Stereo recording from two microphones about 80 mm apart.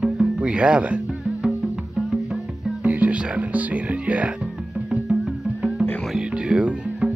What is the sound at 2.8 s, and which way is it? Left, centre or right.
Music, centre.